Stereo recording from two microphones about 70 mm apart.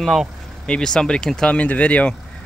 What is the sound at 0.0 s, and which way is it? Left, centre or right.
Speech, centre.